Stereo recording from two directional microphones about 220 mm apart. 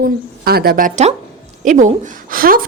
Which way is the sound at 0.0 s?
45° right (ahead or behind).